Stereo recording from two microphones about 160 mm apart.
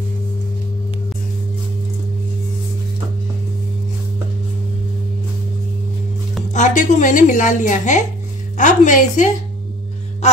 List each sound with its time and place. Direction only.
6.5 s a woman's voice: 50° left (ahead or behind)